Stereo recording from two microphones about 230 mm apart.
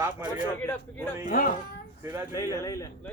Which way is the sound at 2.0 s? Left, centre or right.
Centre.